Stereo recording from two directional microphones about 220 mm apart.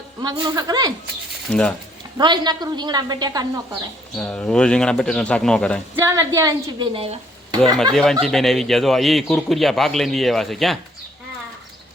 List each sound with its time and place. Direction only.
0.2 s a woman's voice: 20° right (ahead or behind)
2.1 s a woman's voice: 20° right (ahead or behind)
4.2 s a man's voice: 5° left (ahead or behind)
6.0 s a woman's voice: 15° right (ahead or behind)
7.9 s a man's voice: centre (ahead or behind)